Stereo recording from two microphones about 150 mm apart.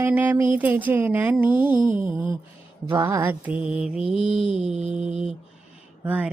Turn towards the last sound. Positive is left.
turn(degrees=-10)  # may be behind; listen again after turning